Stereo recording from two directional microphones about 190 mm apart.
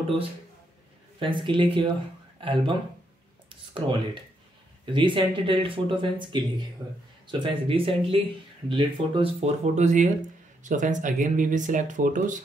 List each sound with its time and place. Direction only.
1.2 s speech: 25° right (ahead or behind)
3.4 s a sound: 25° right (ahead or behind)
4.8 s speech: 25° right (ahead or behind); by 12.4 s 45° right (ahead or behind)